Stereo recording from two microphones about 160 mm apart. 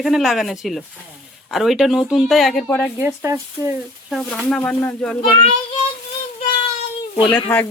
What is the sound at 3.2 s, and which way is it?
Speech, 20° right (ahead or behind).